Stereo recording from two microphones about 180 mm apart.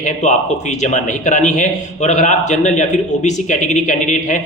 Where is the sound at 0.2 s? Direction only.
40° left (ahead or behind).